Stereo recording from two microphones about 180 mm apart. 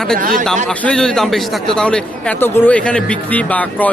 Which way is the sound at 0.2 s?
50° right (ahead or behind).